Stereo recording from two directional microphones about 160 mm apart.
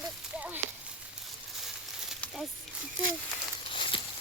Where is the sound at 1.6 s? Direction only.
Centre (ahead or behind).